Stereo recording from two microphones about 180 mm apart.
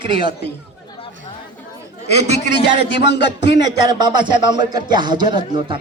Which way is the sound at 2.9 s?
70° left (ahead or behind).